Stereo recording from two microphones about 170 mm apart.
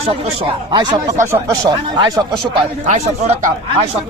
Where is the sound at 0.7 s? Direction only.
25° right (ahead or behind).